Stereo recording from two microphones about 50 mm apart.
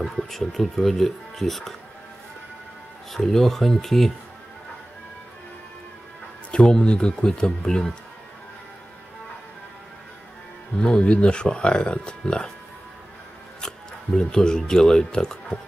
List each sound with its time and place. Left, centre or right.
0.0 s speech: centre
3.1 s speech: centre
6.6 s speech: centre
10.8 s speech: left
13.6 s speech: centre